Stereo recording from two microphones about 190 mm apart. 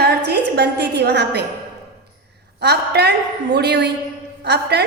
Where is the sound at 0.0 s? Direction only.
60° right (ahead or behind).